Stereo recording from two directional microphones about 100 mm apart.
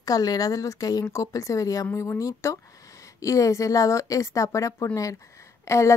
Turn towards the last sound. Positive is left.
turn(degrees=30)  # may be behind; listen again after turning